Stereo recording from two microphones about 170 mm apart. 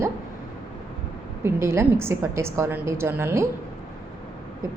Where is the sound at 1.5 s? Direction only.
15° right (ahead or behind).